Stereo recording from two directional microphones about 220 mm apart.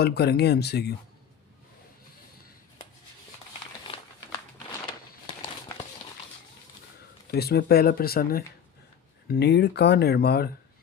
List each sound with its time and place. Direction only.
0.0 s speech: 45° left (ahead or behind)
3.8 s crumpling: 25° left (ahead or behind)
5.2 s a sound: 15° left (ahead or behind)
7.3 s speech: 45° left (ahead or behind)